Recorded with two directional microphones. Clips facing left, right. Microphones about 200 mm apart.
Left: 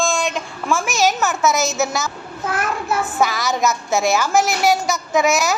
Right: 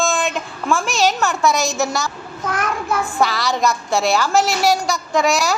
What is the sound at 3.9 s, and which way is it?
A woman's voice, 20° left (ahead or behind).